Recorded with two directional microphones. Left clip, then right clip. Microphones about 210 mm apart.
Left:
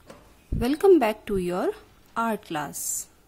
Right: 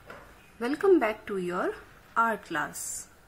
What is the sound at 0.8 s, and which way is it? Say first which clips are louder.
Speech: left 5 dB; 45° left (ahead or behind).